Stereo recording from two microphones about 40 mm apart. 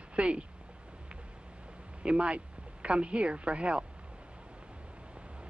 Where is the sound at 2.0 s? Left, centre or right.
Right.